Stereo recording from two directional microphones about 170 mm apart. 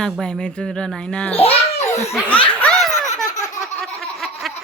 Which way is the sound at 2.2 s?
10° left (ahead or behind).